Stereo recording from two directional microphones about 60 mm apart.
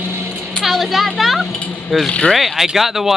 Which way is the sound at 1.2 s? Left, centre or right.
Centre.